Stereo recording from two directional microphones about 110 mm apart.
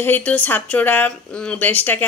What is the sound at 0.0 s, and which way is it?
Speech, 15° left (ahead or behind).